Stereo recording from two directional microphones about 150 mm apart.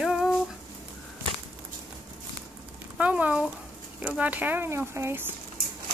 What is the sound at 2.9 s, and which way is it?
Speech, 10° right (ahead or behind).